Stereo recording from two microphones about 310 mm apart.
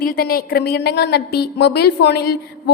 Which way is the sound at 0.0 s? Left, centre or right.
Left.